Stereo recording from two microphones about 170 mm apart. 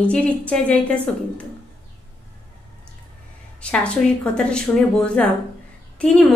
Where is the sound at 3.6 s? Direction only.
5° left (ahead or behind).